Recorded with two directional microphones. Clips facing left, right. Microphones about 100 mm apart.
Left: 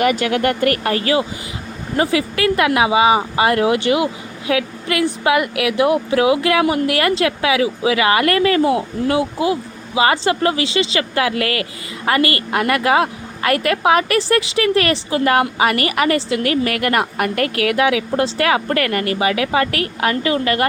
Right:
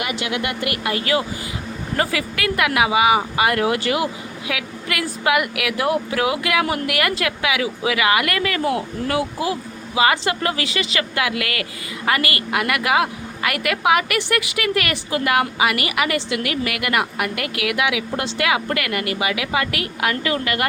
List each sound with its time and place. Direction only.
0.0 s speech: 45° left (ahead or behind)
2.0 s speech: 25° left (ahead or behind)